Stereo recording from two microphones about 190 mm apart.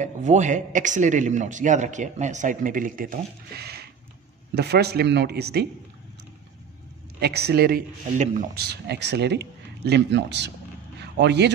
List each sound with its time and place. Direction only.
0.0 s speech: 40° right (ahead or behind); by 5.7 s 60° right (ahead or behind)
7.2 s a man's voice: 60° right (ahead or behind)